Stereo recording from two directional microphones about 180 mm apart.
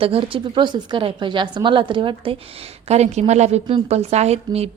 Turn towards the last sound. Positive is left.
turn(degrees=-35)  # may be behind; listen again after turning